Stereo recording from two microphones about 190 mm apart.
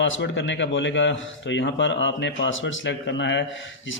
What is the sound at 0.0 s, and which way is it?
Speech, 75° left (ahead or behind).